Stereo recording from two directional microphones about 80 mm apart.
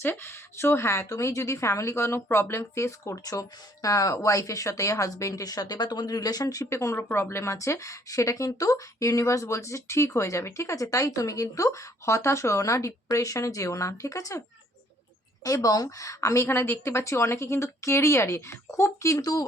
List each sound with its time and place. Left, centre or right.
0.0 s a woman's voice: left
15.4 s a woman's voice: left